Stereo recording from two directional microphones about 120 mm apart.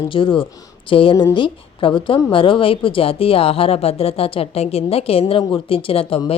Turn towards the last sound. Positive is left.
turn(degrees=50)  # may be behind; listen again after turning